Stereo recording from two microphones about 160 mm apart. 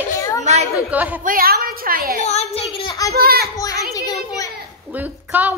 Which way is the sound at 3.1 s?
75° right (ahead or behind).